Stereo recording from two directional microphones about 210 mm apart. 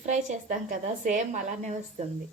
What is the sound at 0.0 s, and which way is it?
Speech, 35° right (ahead or behind).